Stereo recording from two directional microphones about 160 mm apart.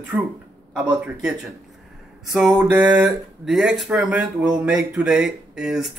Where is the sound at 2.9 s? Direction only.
5° right (ahead or behind).